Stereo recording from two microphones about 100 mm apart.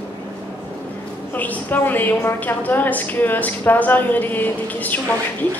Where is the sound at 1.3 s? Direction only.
15° left (ahead or behind).